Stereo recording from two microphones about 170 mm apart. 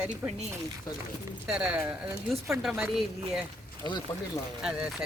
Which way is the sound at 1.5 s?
5° right (ahead or behind).